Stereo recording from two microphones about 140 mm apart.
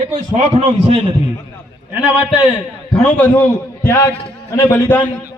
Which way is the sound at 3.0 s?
15° left (ahead or behind).